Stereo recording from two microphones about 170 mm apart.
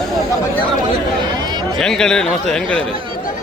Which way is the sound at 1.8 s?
5° left (ahead or behind).